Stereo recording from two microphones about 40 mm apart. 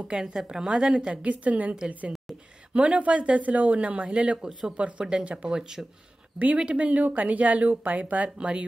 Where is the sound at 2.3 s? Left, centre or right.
Centre.